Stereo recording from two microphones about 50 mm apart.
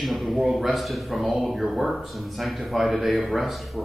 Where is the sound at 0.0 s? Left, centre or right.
Centre.